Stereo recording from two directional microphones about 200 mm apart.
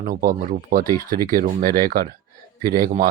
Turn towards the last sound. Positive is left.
turn(degrees=-45)  # may be behind; listen again after turning